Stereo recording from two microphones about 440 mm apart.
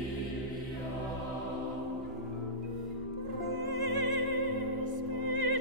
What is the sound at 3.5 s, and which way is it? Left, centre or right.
Music, right.